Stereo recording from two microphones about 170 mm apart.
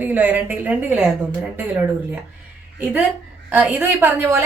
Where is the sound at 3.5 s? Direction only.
10° right (ahead or behind).